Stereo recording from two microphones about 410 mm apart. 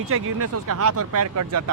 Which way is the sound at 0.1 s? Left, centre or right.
Right.